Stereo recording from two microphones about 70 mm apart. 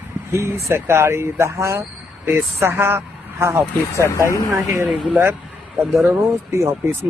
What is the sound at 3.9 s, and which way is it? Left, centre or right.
Speech, left.